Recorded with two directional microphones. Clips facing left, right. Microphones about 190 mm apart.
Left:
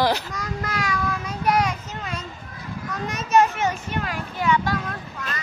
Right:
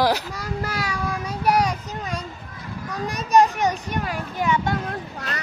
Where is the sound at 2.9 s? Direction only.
35° right (ahead or behind).